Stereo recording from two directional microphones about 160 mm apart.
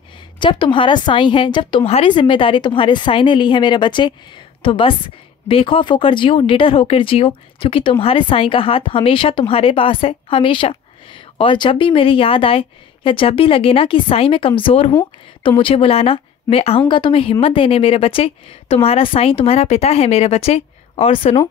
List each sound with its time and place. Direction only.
0.4 s a woman's voice: 30° left (ahead or behind)